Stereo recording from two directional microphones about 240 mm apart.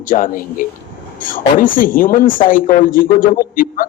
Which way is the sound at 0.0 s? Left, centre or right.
Left.